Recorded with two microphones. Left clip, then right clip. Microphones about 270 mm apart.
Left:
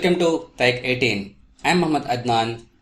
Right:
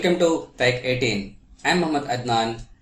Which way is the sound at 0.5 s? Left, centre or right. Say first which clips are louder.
Left 2 dB; left.